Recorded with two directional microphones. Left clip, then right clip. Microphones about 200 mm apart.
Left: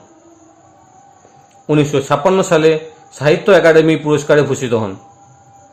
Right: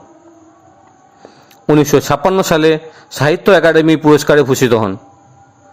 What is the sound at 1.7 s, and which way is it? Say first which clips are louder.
Speech: right 3 dB; 45° right (ahead or behind).